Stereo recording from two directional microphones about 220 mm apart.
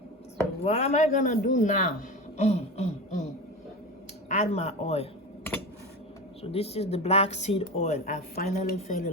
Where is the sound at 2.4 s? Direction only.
30° left (ahead or behind).